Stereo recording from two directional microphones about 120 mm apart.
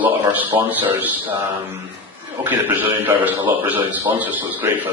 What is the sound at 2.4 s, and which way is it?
A man's voice, 15° right (ahead or behind).